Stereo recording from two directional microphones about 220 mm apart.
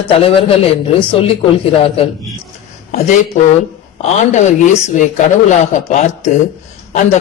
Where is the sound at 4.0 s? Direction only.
30° left (ahead or behind).